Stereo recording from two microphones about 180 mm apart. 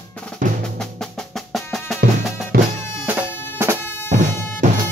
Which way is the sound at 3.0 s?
10° right (ahead or behind).